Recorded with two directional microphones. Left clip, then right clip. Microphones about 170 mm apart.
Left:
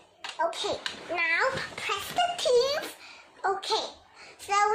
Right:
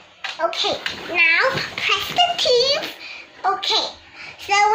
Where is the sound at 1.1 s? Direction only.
30° left (ahead or behind).